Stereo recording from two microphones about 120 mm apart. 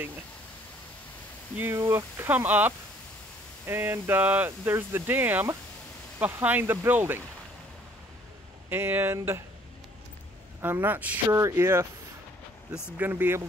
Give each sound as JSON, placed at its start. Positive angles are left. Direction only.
{"t": 1.6, "sound": "speech", "side_deg": -20}
{"t": 8.6, "sound": "speech", "side_deg": -20}
{"t": 10.6, "sound": "speech", "side_deg": -15}